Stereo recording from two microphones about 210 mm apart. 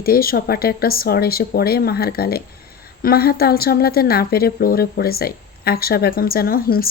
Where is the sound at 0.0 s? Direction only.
45° left (ahead or behind).